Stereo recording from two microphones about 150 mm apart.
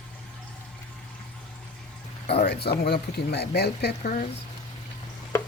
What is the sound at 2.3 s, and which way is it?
Speech, 90° left.